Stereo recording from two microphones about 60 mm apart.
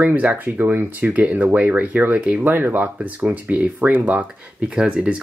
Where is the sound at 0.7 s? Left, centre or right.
Right.